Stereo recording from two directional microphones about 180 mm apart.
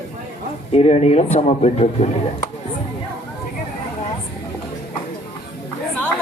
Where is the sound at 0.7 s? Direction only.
35° left (ahead or behind).